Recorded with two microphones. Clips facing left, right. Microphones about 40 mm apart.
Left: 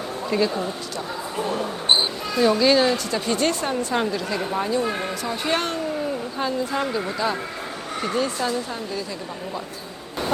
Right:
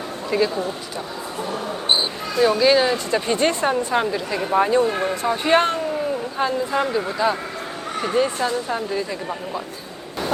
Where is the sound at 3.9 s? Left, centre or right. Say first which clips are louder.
Right 2 dB; centre.